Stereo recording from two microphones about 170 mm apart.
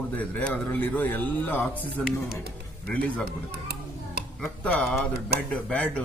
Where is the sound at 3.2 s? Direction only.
65° right (ahead or behind).